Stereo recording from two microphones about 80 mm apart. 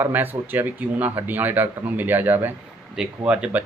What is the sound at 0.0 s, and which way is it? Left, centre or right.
Speech, right.